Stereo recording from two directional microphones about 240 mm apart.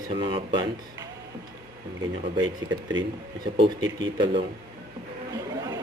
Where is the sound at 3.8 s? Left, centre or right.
Centre.